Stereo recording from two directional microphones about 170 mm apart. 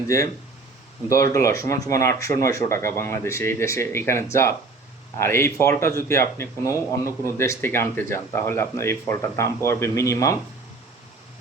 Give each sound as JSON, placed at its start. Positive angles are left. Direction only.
{"t": 1.1, "sound": "speech", "side_deg": 20}